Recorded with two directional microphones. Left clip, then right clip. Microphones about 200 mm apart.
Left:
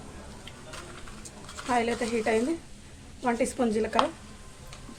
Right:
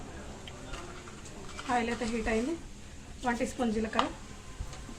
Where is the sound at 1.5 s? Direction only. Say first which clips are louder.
Left 4 dB; 50° left (ahead or behind).